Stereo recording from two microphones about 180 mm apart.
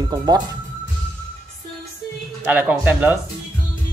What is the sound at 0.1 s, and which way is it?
Speech, 25° right (ahead or behind).